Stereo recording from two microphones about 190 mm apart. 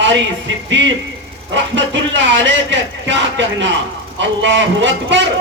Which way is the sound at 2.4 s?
70° right (ahead or behind).